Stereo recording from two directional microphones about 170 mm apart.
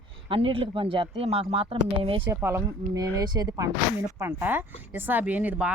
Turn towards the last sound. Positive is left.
turn(degrees=-10)  # may be behind; listen again after turning